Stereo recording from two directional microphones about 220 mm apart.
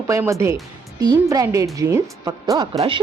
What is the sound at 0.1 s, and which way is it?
Speech, 15° right (ahead or behind).